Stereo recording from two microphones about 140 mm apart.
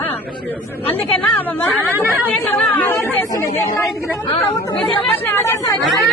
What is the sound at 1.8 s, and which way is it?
Speech, 15° right (ahead or behind).